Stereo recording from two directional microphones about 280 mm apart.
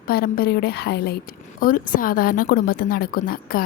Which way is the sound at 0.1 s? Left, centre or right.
Left.